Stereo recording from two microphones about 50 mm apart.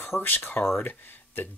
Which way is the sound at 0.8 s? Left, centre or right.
Left.